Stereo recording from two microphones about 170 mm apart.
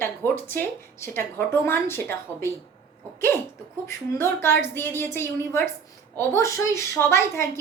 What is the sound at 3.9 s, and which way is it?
A woman's voice, 15° left (ahead or behind).